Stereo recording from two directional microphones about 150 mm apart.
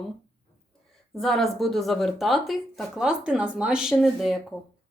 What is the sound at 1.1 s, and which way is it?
Speech, centre (ahead or behind).